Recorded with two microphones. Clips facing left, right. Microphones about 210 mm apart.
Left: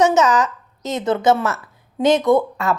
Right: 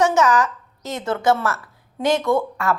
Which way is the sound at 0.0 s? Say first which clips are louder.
Left 2 dB; 20° left (ahead or behind).